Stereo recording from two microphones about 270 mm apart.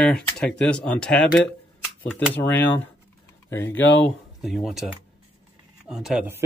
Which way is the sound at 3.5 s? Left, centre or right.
Centre.